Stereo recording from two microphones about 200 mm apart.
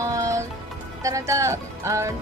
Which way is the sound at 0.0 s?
15° right (ahead or behind).